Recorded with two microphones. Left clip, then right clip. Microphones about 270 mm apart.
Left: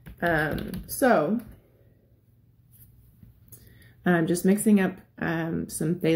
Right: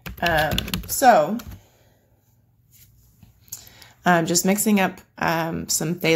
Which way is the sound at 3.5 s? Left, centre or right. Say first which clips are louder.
Right 15 dB; centre.